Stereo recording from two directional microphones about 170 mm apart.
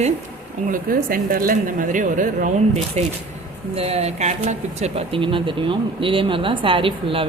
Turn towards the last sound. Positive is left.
turn(degrees=-30)  # may be behind; listen again after turning